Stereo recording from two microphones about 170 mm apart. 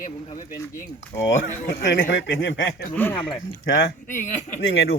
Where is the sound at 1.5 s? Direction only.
65° left (ahead or behind); by 2.8 s 90° left.